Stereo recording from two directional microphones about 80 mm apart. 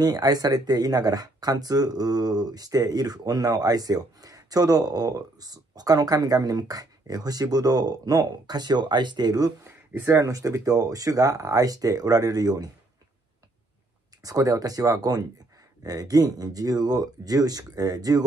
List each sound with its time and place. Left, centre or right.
0.0 s speech: right
9.7 s speech: right
10.3 s speech: right
14.2 s speech: right